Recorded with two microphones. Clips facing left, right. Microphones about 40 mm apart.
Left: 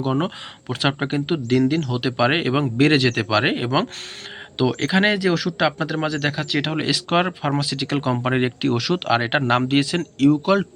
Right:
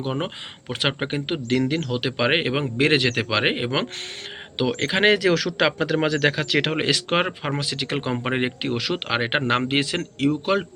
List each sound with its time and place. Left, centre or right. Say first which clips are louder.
0.0 s speech: left 5 dB; centre
0.7 s speech: left 3 dB; right
4.7 s speech: left 1 dB; right
5.0 s a man's voice: right 1 dB; right
6.7 s speech: even; right
7.9 s speech: left 4 dB; right